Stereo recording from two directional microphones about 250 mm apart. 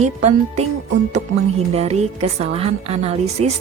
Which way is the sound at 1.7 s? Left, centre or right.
Right.